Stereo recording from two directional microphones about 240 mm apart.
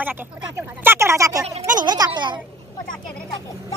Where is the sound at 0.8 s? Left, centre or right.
Centre.